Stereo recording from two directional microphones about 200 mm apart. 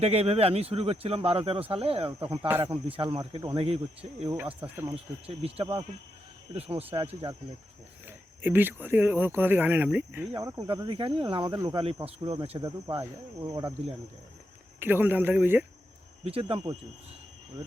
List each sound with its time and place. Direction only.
0.0 s speech: 30° right (ahead or behind)
4.6 s speech: 10° right (ahead or behind)
4.9 s speech: 30° right (ahead or behind)
8.0 s speech: 10° right (ahead or behind)
14.8 s speech: 10° right (ahead or behind)
16.2 s speech: 30° right (ahead or behind)